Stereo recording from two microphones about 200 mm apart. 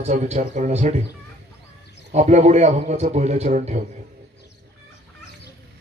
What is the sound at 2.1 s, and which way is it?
A man's voice, 35° right (ahead or behind).